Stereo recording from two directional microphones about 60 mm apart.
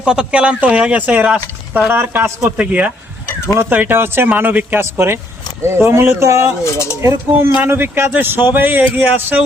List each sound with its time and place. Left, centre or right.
0.0 s a man's voice: centre; by 2.3 s right
2.6 s a man's voice: right
6.7 s speech: left
7.0 s speech: right
7.6 s speech: right